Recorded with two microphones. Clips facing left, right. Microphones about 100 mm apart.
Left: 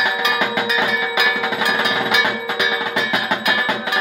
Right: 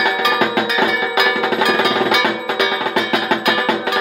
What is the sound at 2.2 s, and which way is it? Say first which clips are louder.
Music: right 3 dB; 55° right (ahead or behind).